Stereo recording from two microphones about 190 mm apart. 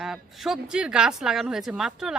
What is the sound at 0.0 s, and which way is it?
Speech, centre (ahead or behind).